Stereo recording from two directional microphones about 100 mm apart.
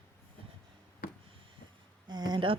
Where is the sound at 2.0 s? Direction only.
45° right (ahead or behind).